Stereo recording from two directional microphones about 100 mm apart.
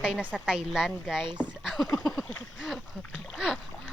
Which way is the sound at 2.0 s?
Centre (ahead or behind).